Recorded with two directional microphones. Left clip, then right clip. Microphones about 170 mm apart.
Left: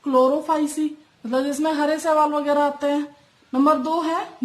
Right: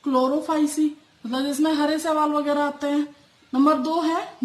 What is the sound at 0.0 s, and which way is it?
A woman's voice, 30° left (ahead or behind).